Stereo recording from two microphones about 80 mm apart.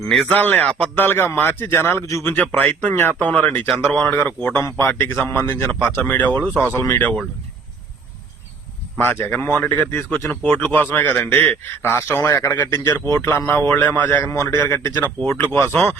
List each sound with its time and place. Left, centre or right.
0.1 s a man's voice: centre
0.3 s a man's voice: left
2.2 s a man's voice: centre
9.0 s a man's voice: left
14.3 s a man's voice: left